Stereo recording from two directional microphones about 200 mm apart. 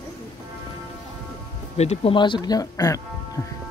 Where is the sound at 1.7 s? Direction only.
30° left (ahead or behind); by 3.0 s 15° left (ahead or behind).